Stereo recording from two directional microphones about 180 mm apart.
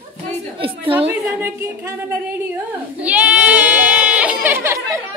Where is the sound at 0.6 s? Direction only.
30° right (ahead or behind).